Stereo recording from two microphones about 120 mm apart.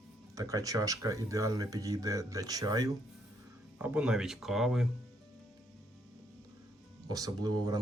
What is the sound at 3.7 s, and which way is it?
Speech, 10° right (ahead or behind).